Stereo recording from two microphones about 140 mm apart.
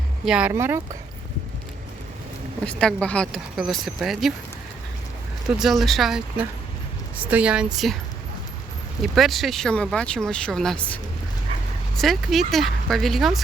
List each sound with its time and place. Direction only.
0.3 s a woman's voice: 5° right (ahead or behind)
2.6 s speech: 5° left (ahead or behind)
5.5 s a woman's voice: centre (ahead or behind)
9.0 s speech: centre (ahead or behind)